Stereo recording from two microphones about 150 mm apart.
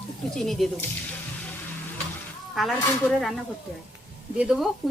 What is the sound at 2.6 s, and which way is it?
Speech, centre (ahead or behind).